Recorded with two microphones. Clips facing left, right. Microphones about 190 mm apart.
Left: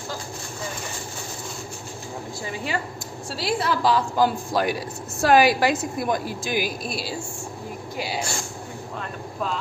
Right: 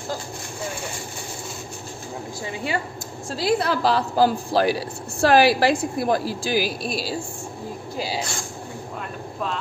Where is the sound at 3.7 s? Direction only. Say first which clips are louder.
Even; 35° right (ahead or behind).